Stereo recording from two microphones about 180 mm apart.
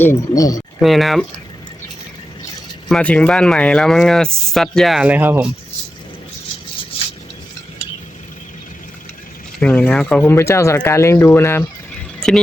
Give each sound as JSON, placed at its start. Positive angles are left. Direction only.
{"t": 0.0, "sound": "speech", "side_deg": 15}
{"t": 0.8, "sound": "speech", "side_deg": 0}
{"t": 2.9, "sound": "speech", "side_deg": 5}
{"t": 9.6, "sound": "speech", "side_deg": 5}